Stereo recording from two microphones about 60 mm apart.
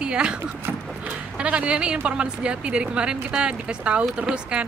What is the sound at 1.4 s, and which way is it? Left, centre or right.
A woman's voice, centre.